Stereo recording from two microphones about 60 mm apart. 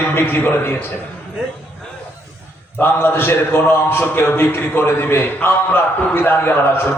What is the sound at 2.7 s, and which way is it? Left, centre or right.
A man's voice, left.